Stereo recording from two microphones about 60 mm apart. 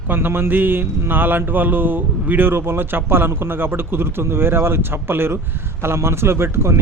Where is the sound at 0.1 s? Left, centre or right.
Right.